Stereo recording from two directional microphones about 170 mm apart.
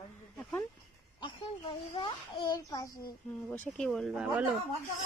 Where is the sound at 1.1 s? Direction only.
30° left (ahead or behind).